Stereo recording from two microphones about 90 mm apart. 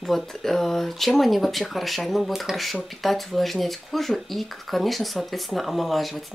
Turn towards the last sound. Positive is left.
turn(degrees=0)  # may be behind; listen again after turning